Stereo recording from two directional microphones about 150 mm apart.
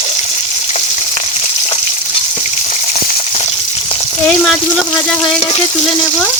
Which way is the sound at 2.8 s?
60° left (ahead or behind).